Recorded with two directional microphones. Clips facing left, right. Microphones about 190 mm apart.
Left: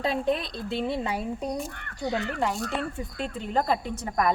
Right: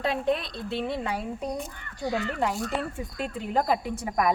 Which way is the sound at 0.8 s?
5° left (ahead or behind).